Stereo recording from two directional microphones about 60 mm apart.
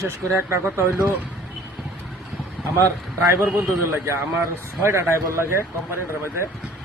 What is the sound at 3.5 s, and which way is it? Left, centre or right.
Speech, right.